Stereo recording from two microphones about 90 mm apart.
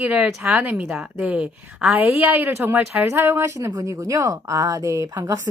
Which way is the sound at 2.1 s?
25° right (ahead or behind).